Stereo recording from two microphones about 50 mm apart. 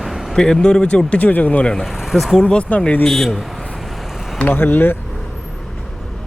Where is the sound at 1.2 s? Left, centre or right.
Left.